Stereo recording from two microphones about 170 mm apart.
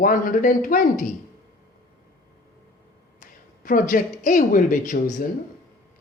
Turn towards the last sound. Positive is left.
turn(degrees=50)  # may be behind; listen again after turning